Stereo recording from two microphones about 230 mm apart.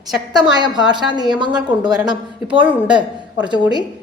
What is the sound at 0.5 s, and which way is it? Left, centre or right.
Speech, centre.